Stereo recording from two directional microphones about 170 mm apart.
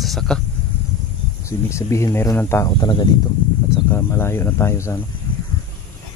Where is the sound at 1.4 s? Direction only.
15° left (ahead or behind).